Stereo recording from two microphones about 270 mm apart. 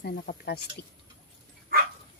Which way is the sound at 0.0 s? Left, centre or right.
Left.